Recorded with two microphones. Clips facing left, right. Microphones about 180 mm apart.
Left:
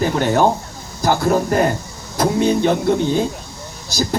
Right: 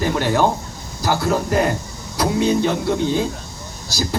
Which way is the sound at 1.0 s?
50° left (ahead or behind).